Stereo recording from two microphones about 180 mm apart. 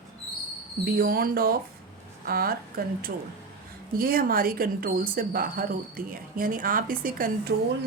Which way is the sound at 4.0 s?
55° right (ahead or behind).